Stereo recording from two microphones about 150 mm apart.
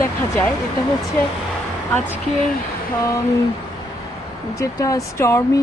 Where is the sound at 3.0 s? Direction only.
20° left (ahead or behind).